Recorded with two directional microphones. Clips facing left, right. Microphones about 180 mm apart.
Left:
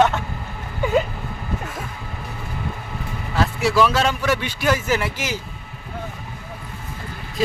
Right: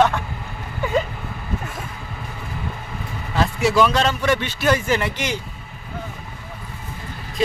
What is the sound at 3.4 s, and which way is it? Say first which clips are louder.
Speech: right 1 dB; centre (ahead or behind).